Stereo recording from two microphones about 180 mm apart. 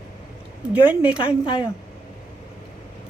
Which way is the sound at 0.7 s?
10° right (ahead or behind).